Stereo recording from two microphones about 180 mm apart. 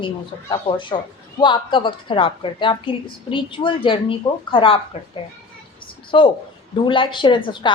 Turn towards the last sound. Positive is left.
turn(degrees=25)  # may be behind; listen again after turning